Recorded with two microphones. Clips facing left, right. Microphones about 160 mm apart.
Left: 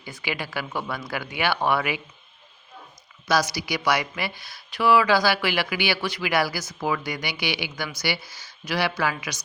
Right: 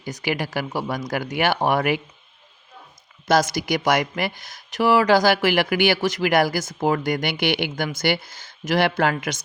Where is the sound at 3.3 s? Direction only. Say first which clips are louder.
Right 5 dB; 50° right (ahead or behind).